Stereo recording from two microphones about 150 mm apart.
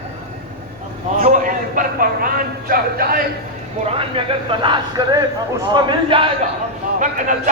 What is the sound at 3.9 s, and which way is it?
Speech, 35° right (ahead or behind).